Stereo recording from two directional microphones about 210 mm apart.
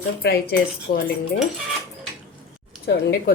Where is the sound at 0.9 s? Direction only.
40° left (ahead or behind).